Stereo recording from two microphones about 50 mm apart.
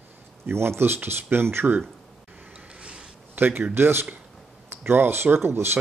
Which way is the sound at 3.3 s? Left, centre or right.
Right.